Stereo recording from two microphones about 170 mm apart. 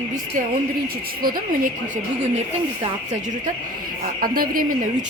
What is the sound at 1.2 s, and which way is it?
Speech, 55° right (ahead or behind).